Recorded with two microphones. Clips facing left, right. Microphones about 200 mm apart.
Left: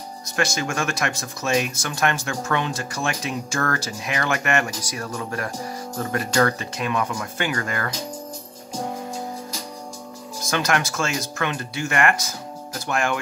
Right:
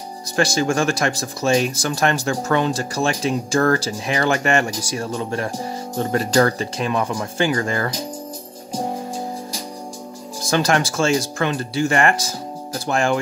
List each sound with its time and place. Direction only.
0.4 s speech: 30° right (ahead or behind)
10.4 s speech: 30° right (ahead or behind)